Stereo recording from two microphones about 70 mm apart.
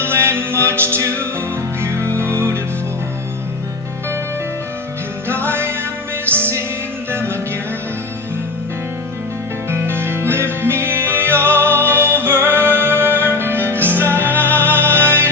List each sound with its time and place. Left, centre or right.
0.0 s music: right
2.1 s music: right
5.3 s music: right
9.6 s music: right